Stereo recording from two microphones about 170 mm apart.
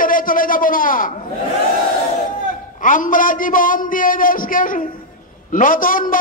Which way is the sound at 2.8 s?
50° left (ahead or behind).